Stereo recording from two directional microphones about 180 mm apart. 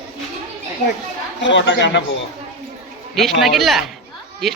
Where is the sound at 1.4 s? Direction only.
90° left.